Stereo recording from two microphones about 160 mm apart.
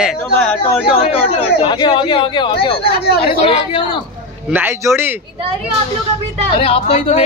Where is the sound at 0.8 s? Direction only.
35° left (ahead or behind).